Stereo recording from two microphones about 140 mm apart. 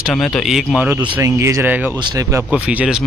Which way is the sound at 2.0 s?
30° right (ahead or behind).